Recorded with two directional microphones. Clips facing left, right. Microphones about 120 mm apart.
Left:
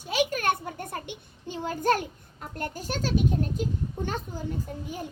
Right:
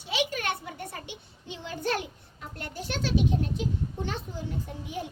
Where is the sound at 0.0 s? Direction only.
45° left (ahead or behind).